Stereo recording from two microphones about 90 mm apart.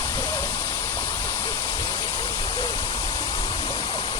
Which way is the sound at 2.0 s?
35° left (ahead or behind).